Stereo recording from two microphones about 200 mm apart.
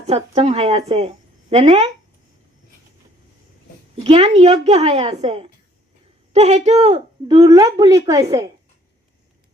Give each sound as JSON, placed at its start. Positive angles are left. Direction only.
{"t": 0.0, "sound": "a woman's voice", "side_deg": -35}
{"t": 3.9, "sound": "a woman's voice", "side_deg": -30}